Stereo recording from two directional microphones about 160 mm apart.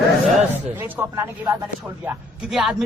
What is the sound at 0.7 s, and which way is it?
A man's voice, 10° right (ahead or behind).